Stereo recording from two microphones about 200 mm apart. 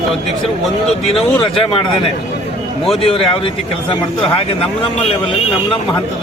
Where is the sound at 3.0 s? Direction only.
30° left (ahead or behind).